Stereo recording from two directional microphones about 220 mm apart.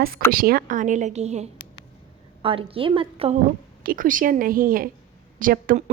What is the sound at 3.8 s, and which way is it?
Speech, 40° right (ahead or behind).